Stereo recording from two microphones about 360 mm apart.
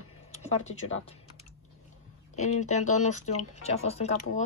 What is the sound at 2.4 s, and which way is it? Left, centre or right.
Speech, centre.